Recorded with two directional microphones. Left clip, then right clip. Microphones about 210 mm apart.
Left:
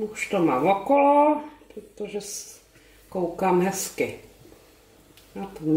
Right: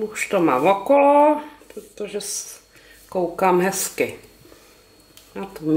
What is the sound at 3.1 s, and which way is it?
Speech, 15° left (ahead or behind).